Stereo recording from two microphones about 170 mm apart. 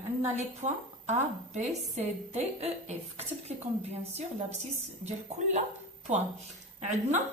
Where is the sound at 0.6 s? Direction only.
40° right (ahead or behind).